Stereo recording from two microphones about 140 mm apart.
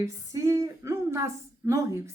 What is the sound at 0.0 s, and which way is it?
A woman's voice, 25° right (ahead or behind).